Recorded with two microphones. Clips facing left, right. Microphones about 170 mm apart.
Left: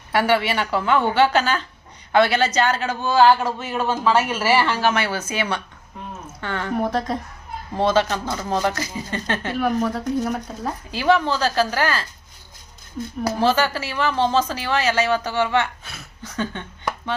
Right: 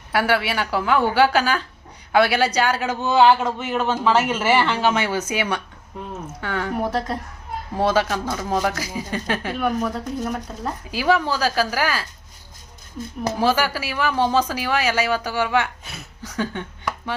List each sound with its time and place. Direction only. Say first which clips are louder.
0.1 s speech: left 1 dB; 5° right (ahead or behind)
10.9 s speech: left 1 dB; 10° right (ahead or behind)
13.3 s speech: left 1 dB; 10° right (ahead or behind)